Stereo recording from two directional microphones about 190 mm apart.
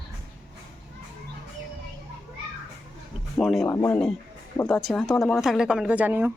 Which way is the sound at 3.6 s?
15° left (ahead or behind).